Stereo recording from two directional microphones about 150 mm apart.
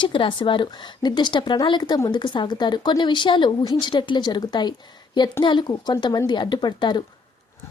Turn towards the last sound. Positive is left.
turn(degrees=30)  # may be behind; listen again after turning